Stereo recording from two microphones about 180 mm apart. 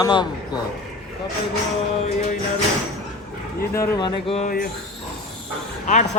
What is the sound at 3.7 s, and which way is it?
Speech, 20° left (ahead or behind).